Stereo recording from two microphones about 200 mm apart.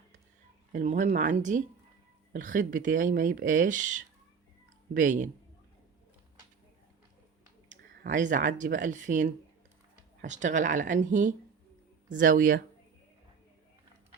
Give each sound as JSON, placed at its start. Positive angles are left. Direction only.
{"t": 0.7, "sound": "speech", "side_deg": -40}
{"t": 7.7, "sound": "speech", "side_deg": -40}